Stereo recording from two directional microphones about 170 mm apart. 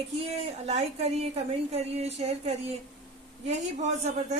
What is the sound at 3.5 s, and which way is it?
Speech, 40° right (ahead or behind).